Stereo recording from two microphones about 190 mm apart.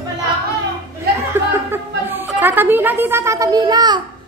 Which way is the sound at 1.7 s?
10° right (ahead or behind).